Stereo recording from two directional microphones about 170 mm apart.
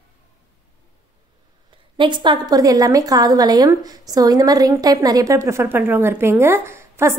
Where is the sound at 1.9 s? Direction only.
30° right (ahead or behind).